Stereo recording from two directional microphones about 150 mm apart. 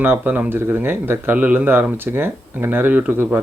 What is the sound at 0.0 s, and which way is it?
A man's voice, 10° right (ahead or behind).